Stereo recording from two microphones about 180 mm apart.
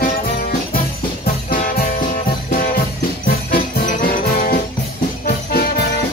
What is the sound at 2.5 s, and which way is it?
Music, 55° left (ahead or behind).